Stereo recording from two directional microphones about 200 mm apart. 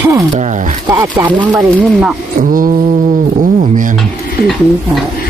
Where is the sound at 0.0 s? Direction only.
15° right (ahead or behind).